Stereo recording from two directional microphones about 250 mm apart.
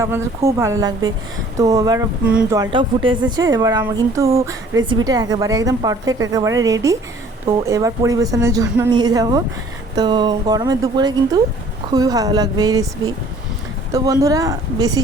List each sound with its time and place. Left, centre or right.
0.0 s a woman's voice: centre
2.7 s a woman's voice: centre